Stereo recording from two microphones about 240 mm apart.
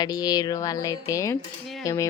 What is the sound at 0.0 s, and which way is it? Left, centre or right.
Speech, centre.